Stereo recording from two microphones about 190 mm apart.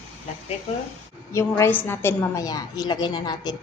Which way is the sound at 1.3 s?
15° left (ahead or behind).